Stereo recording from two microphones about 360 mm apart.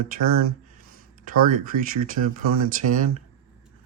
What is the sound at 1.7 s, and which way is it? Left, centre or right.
Speech, right.